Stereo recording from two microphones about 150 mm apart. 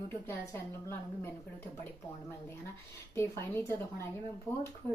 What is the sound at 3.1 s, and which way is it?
Speech, 15° left (ahead or behind).